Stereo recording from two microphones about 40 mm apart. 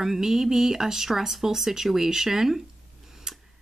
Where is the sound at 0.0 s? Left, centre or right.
Centre.